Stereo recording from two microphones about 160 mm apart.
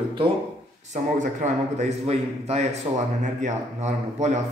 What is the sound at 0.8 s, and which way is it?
A man's voice, 50° right (ahead or behind).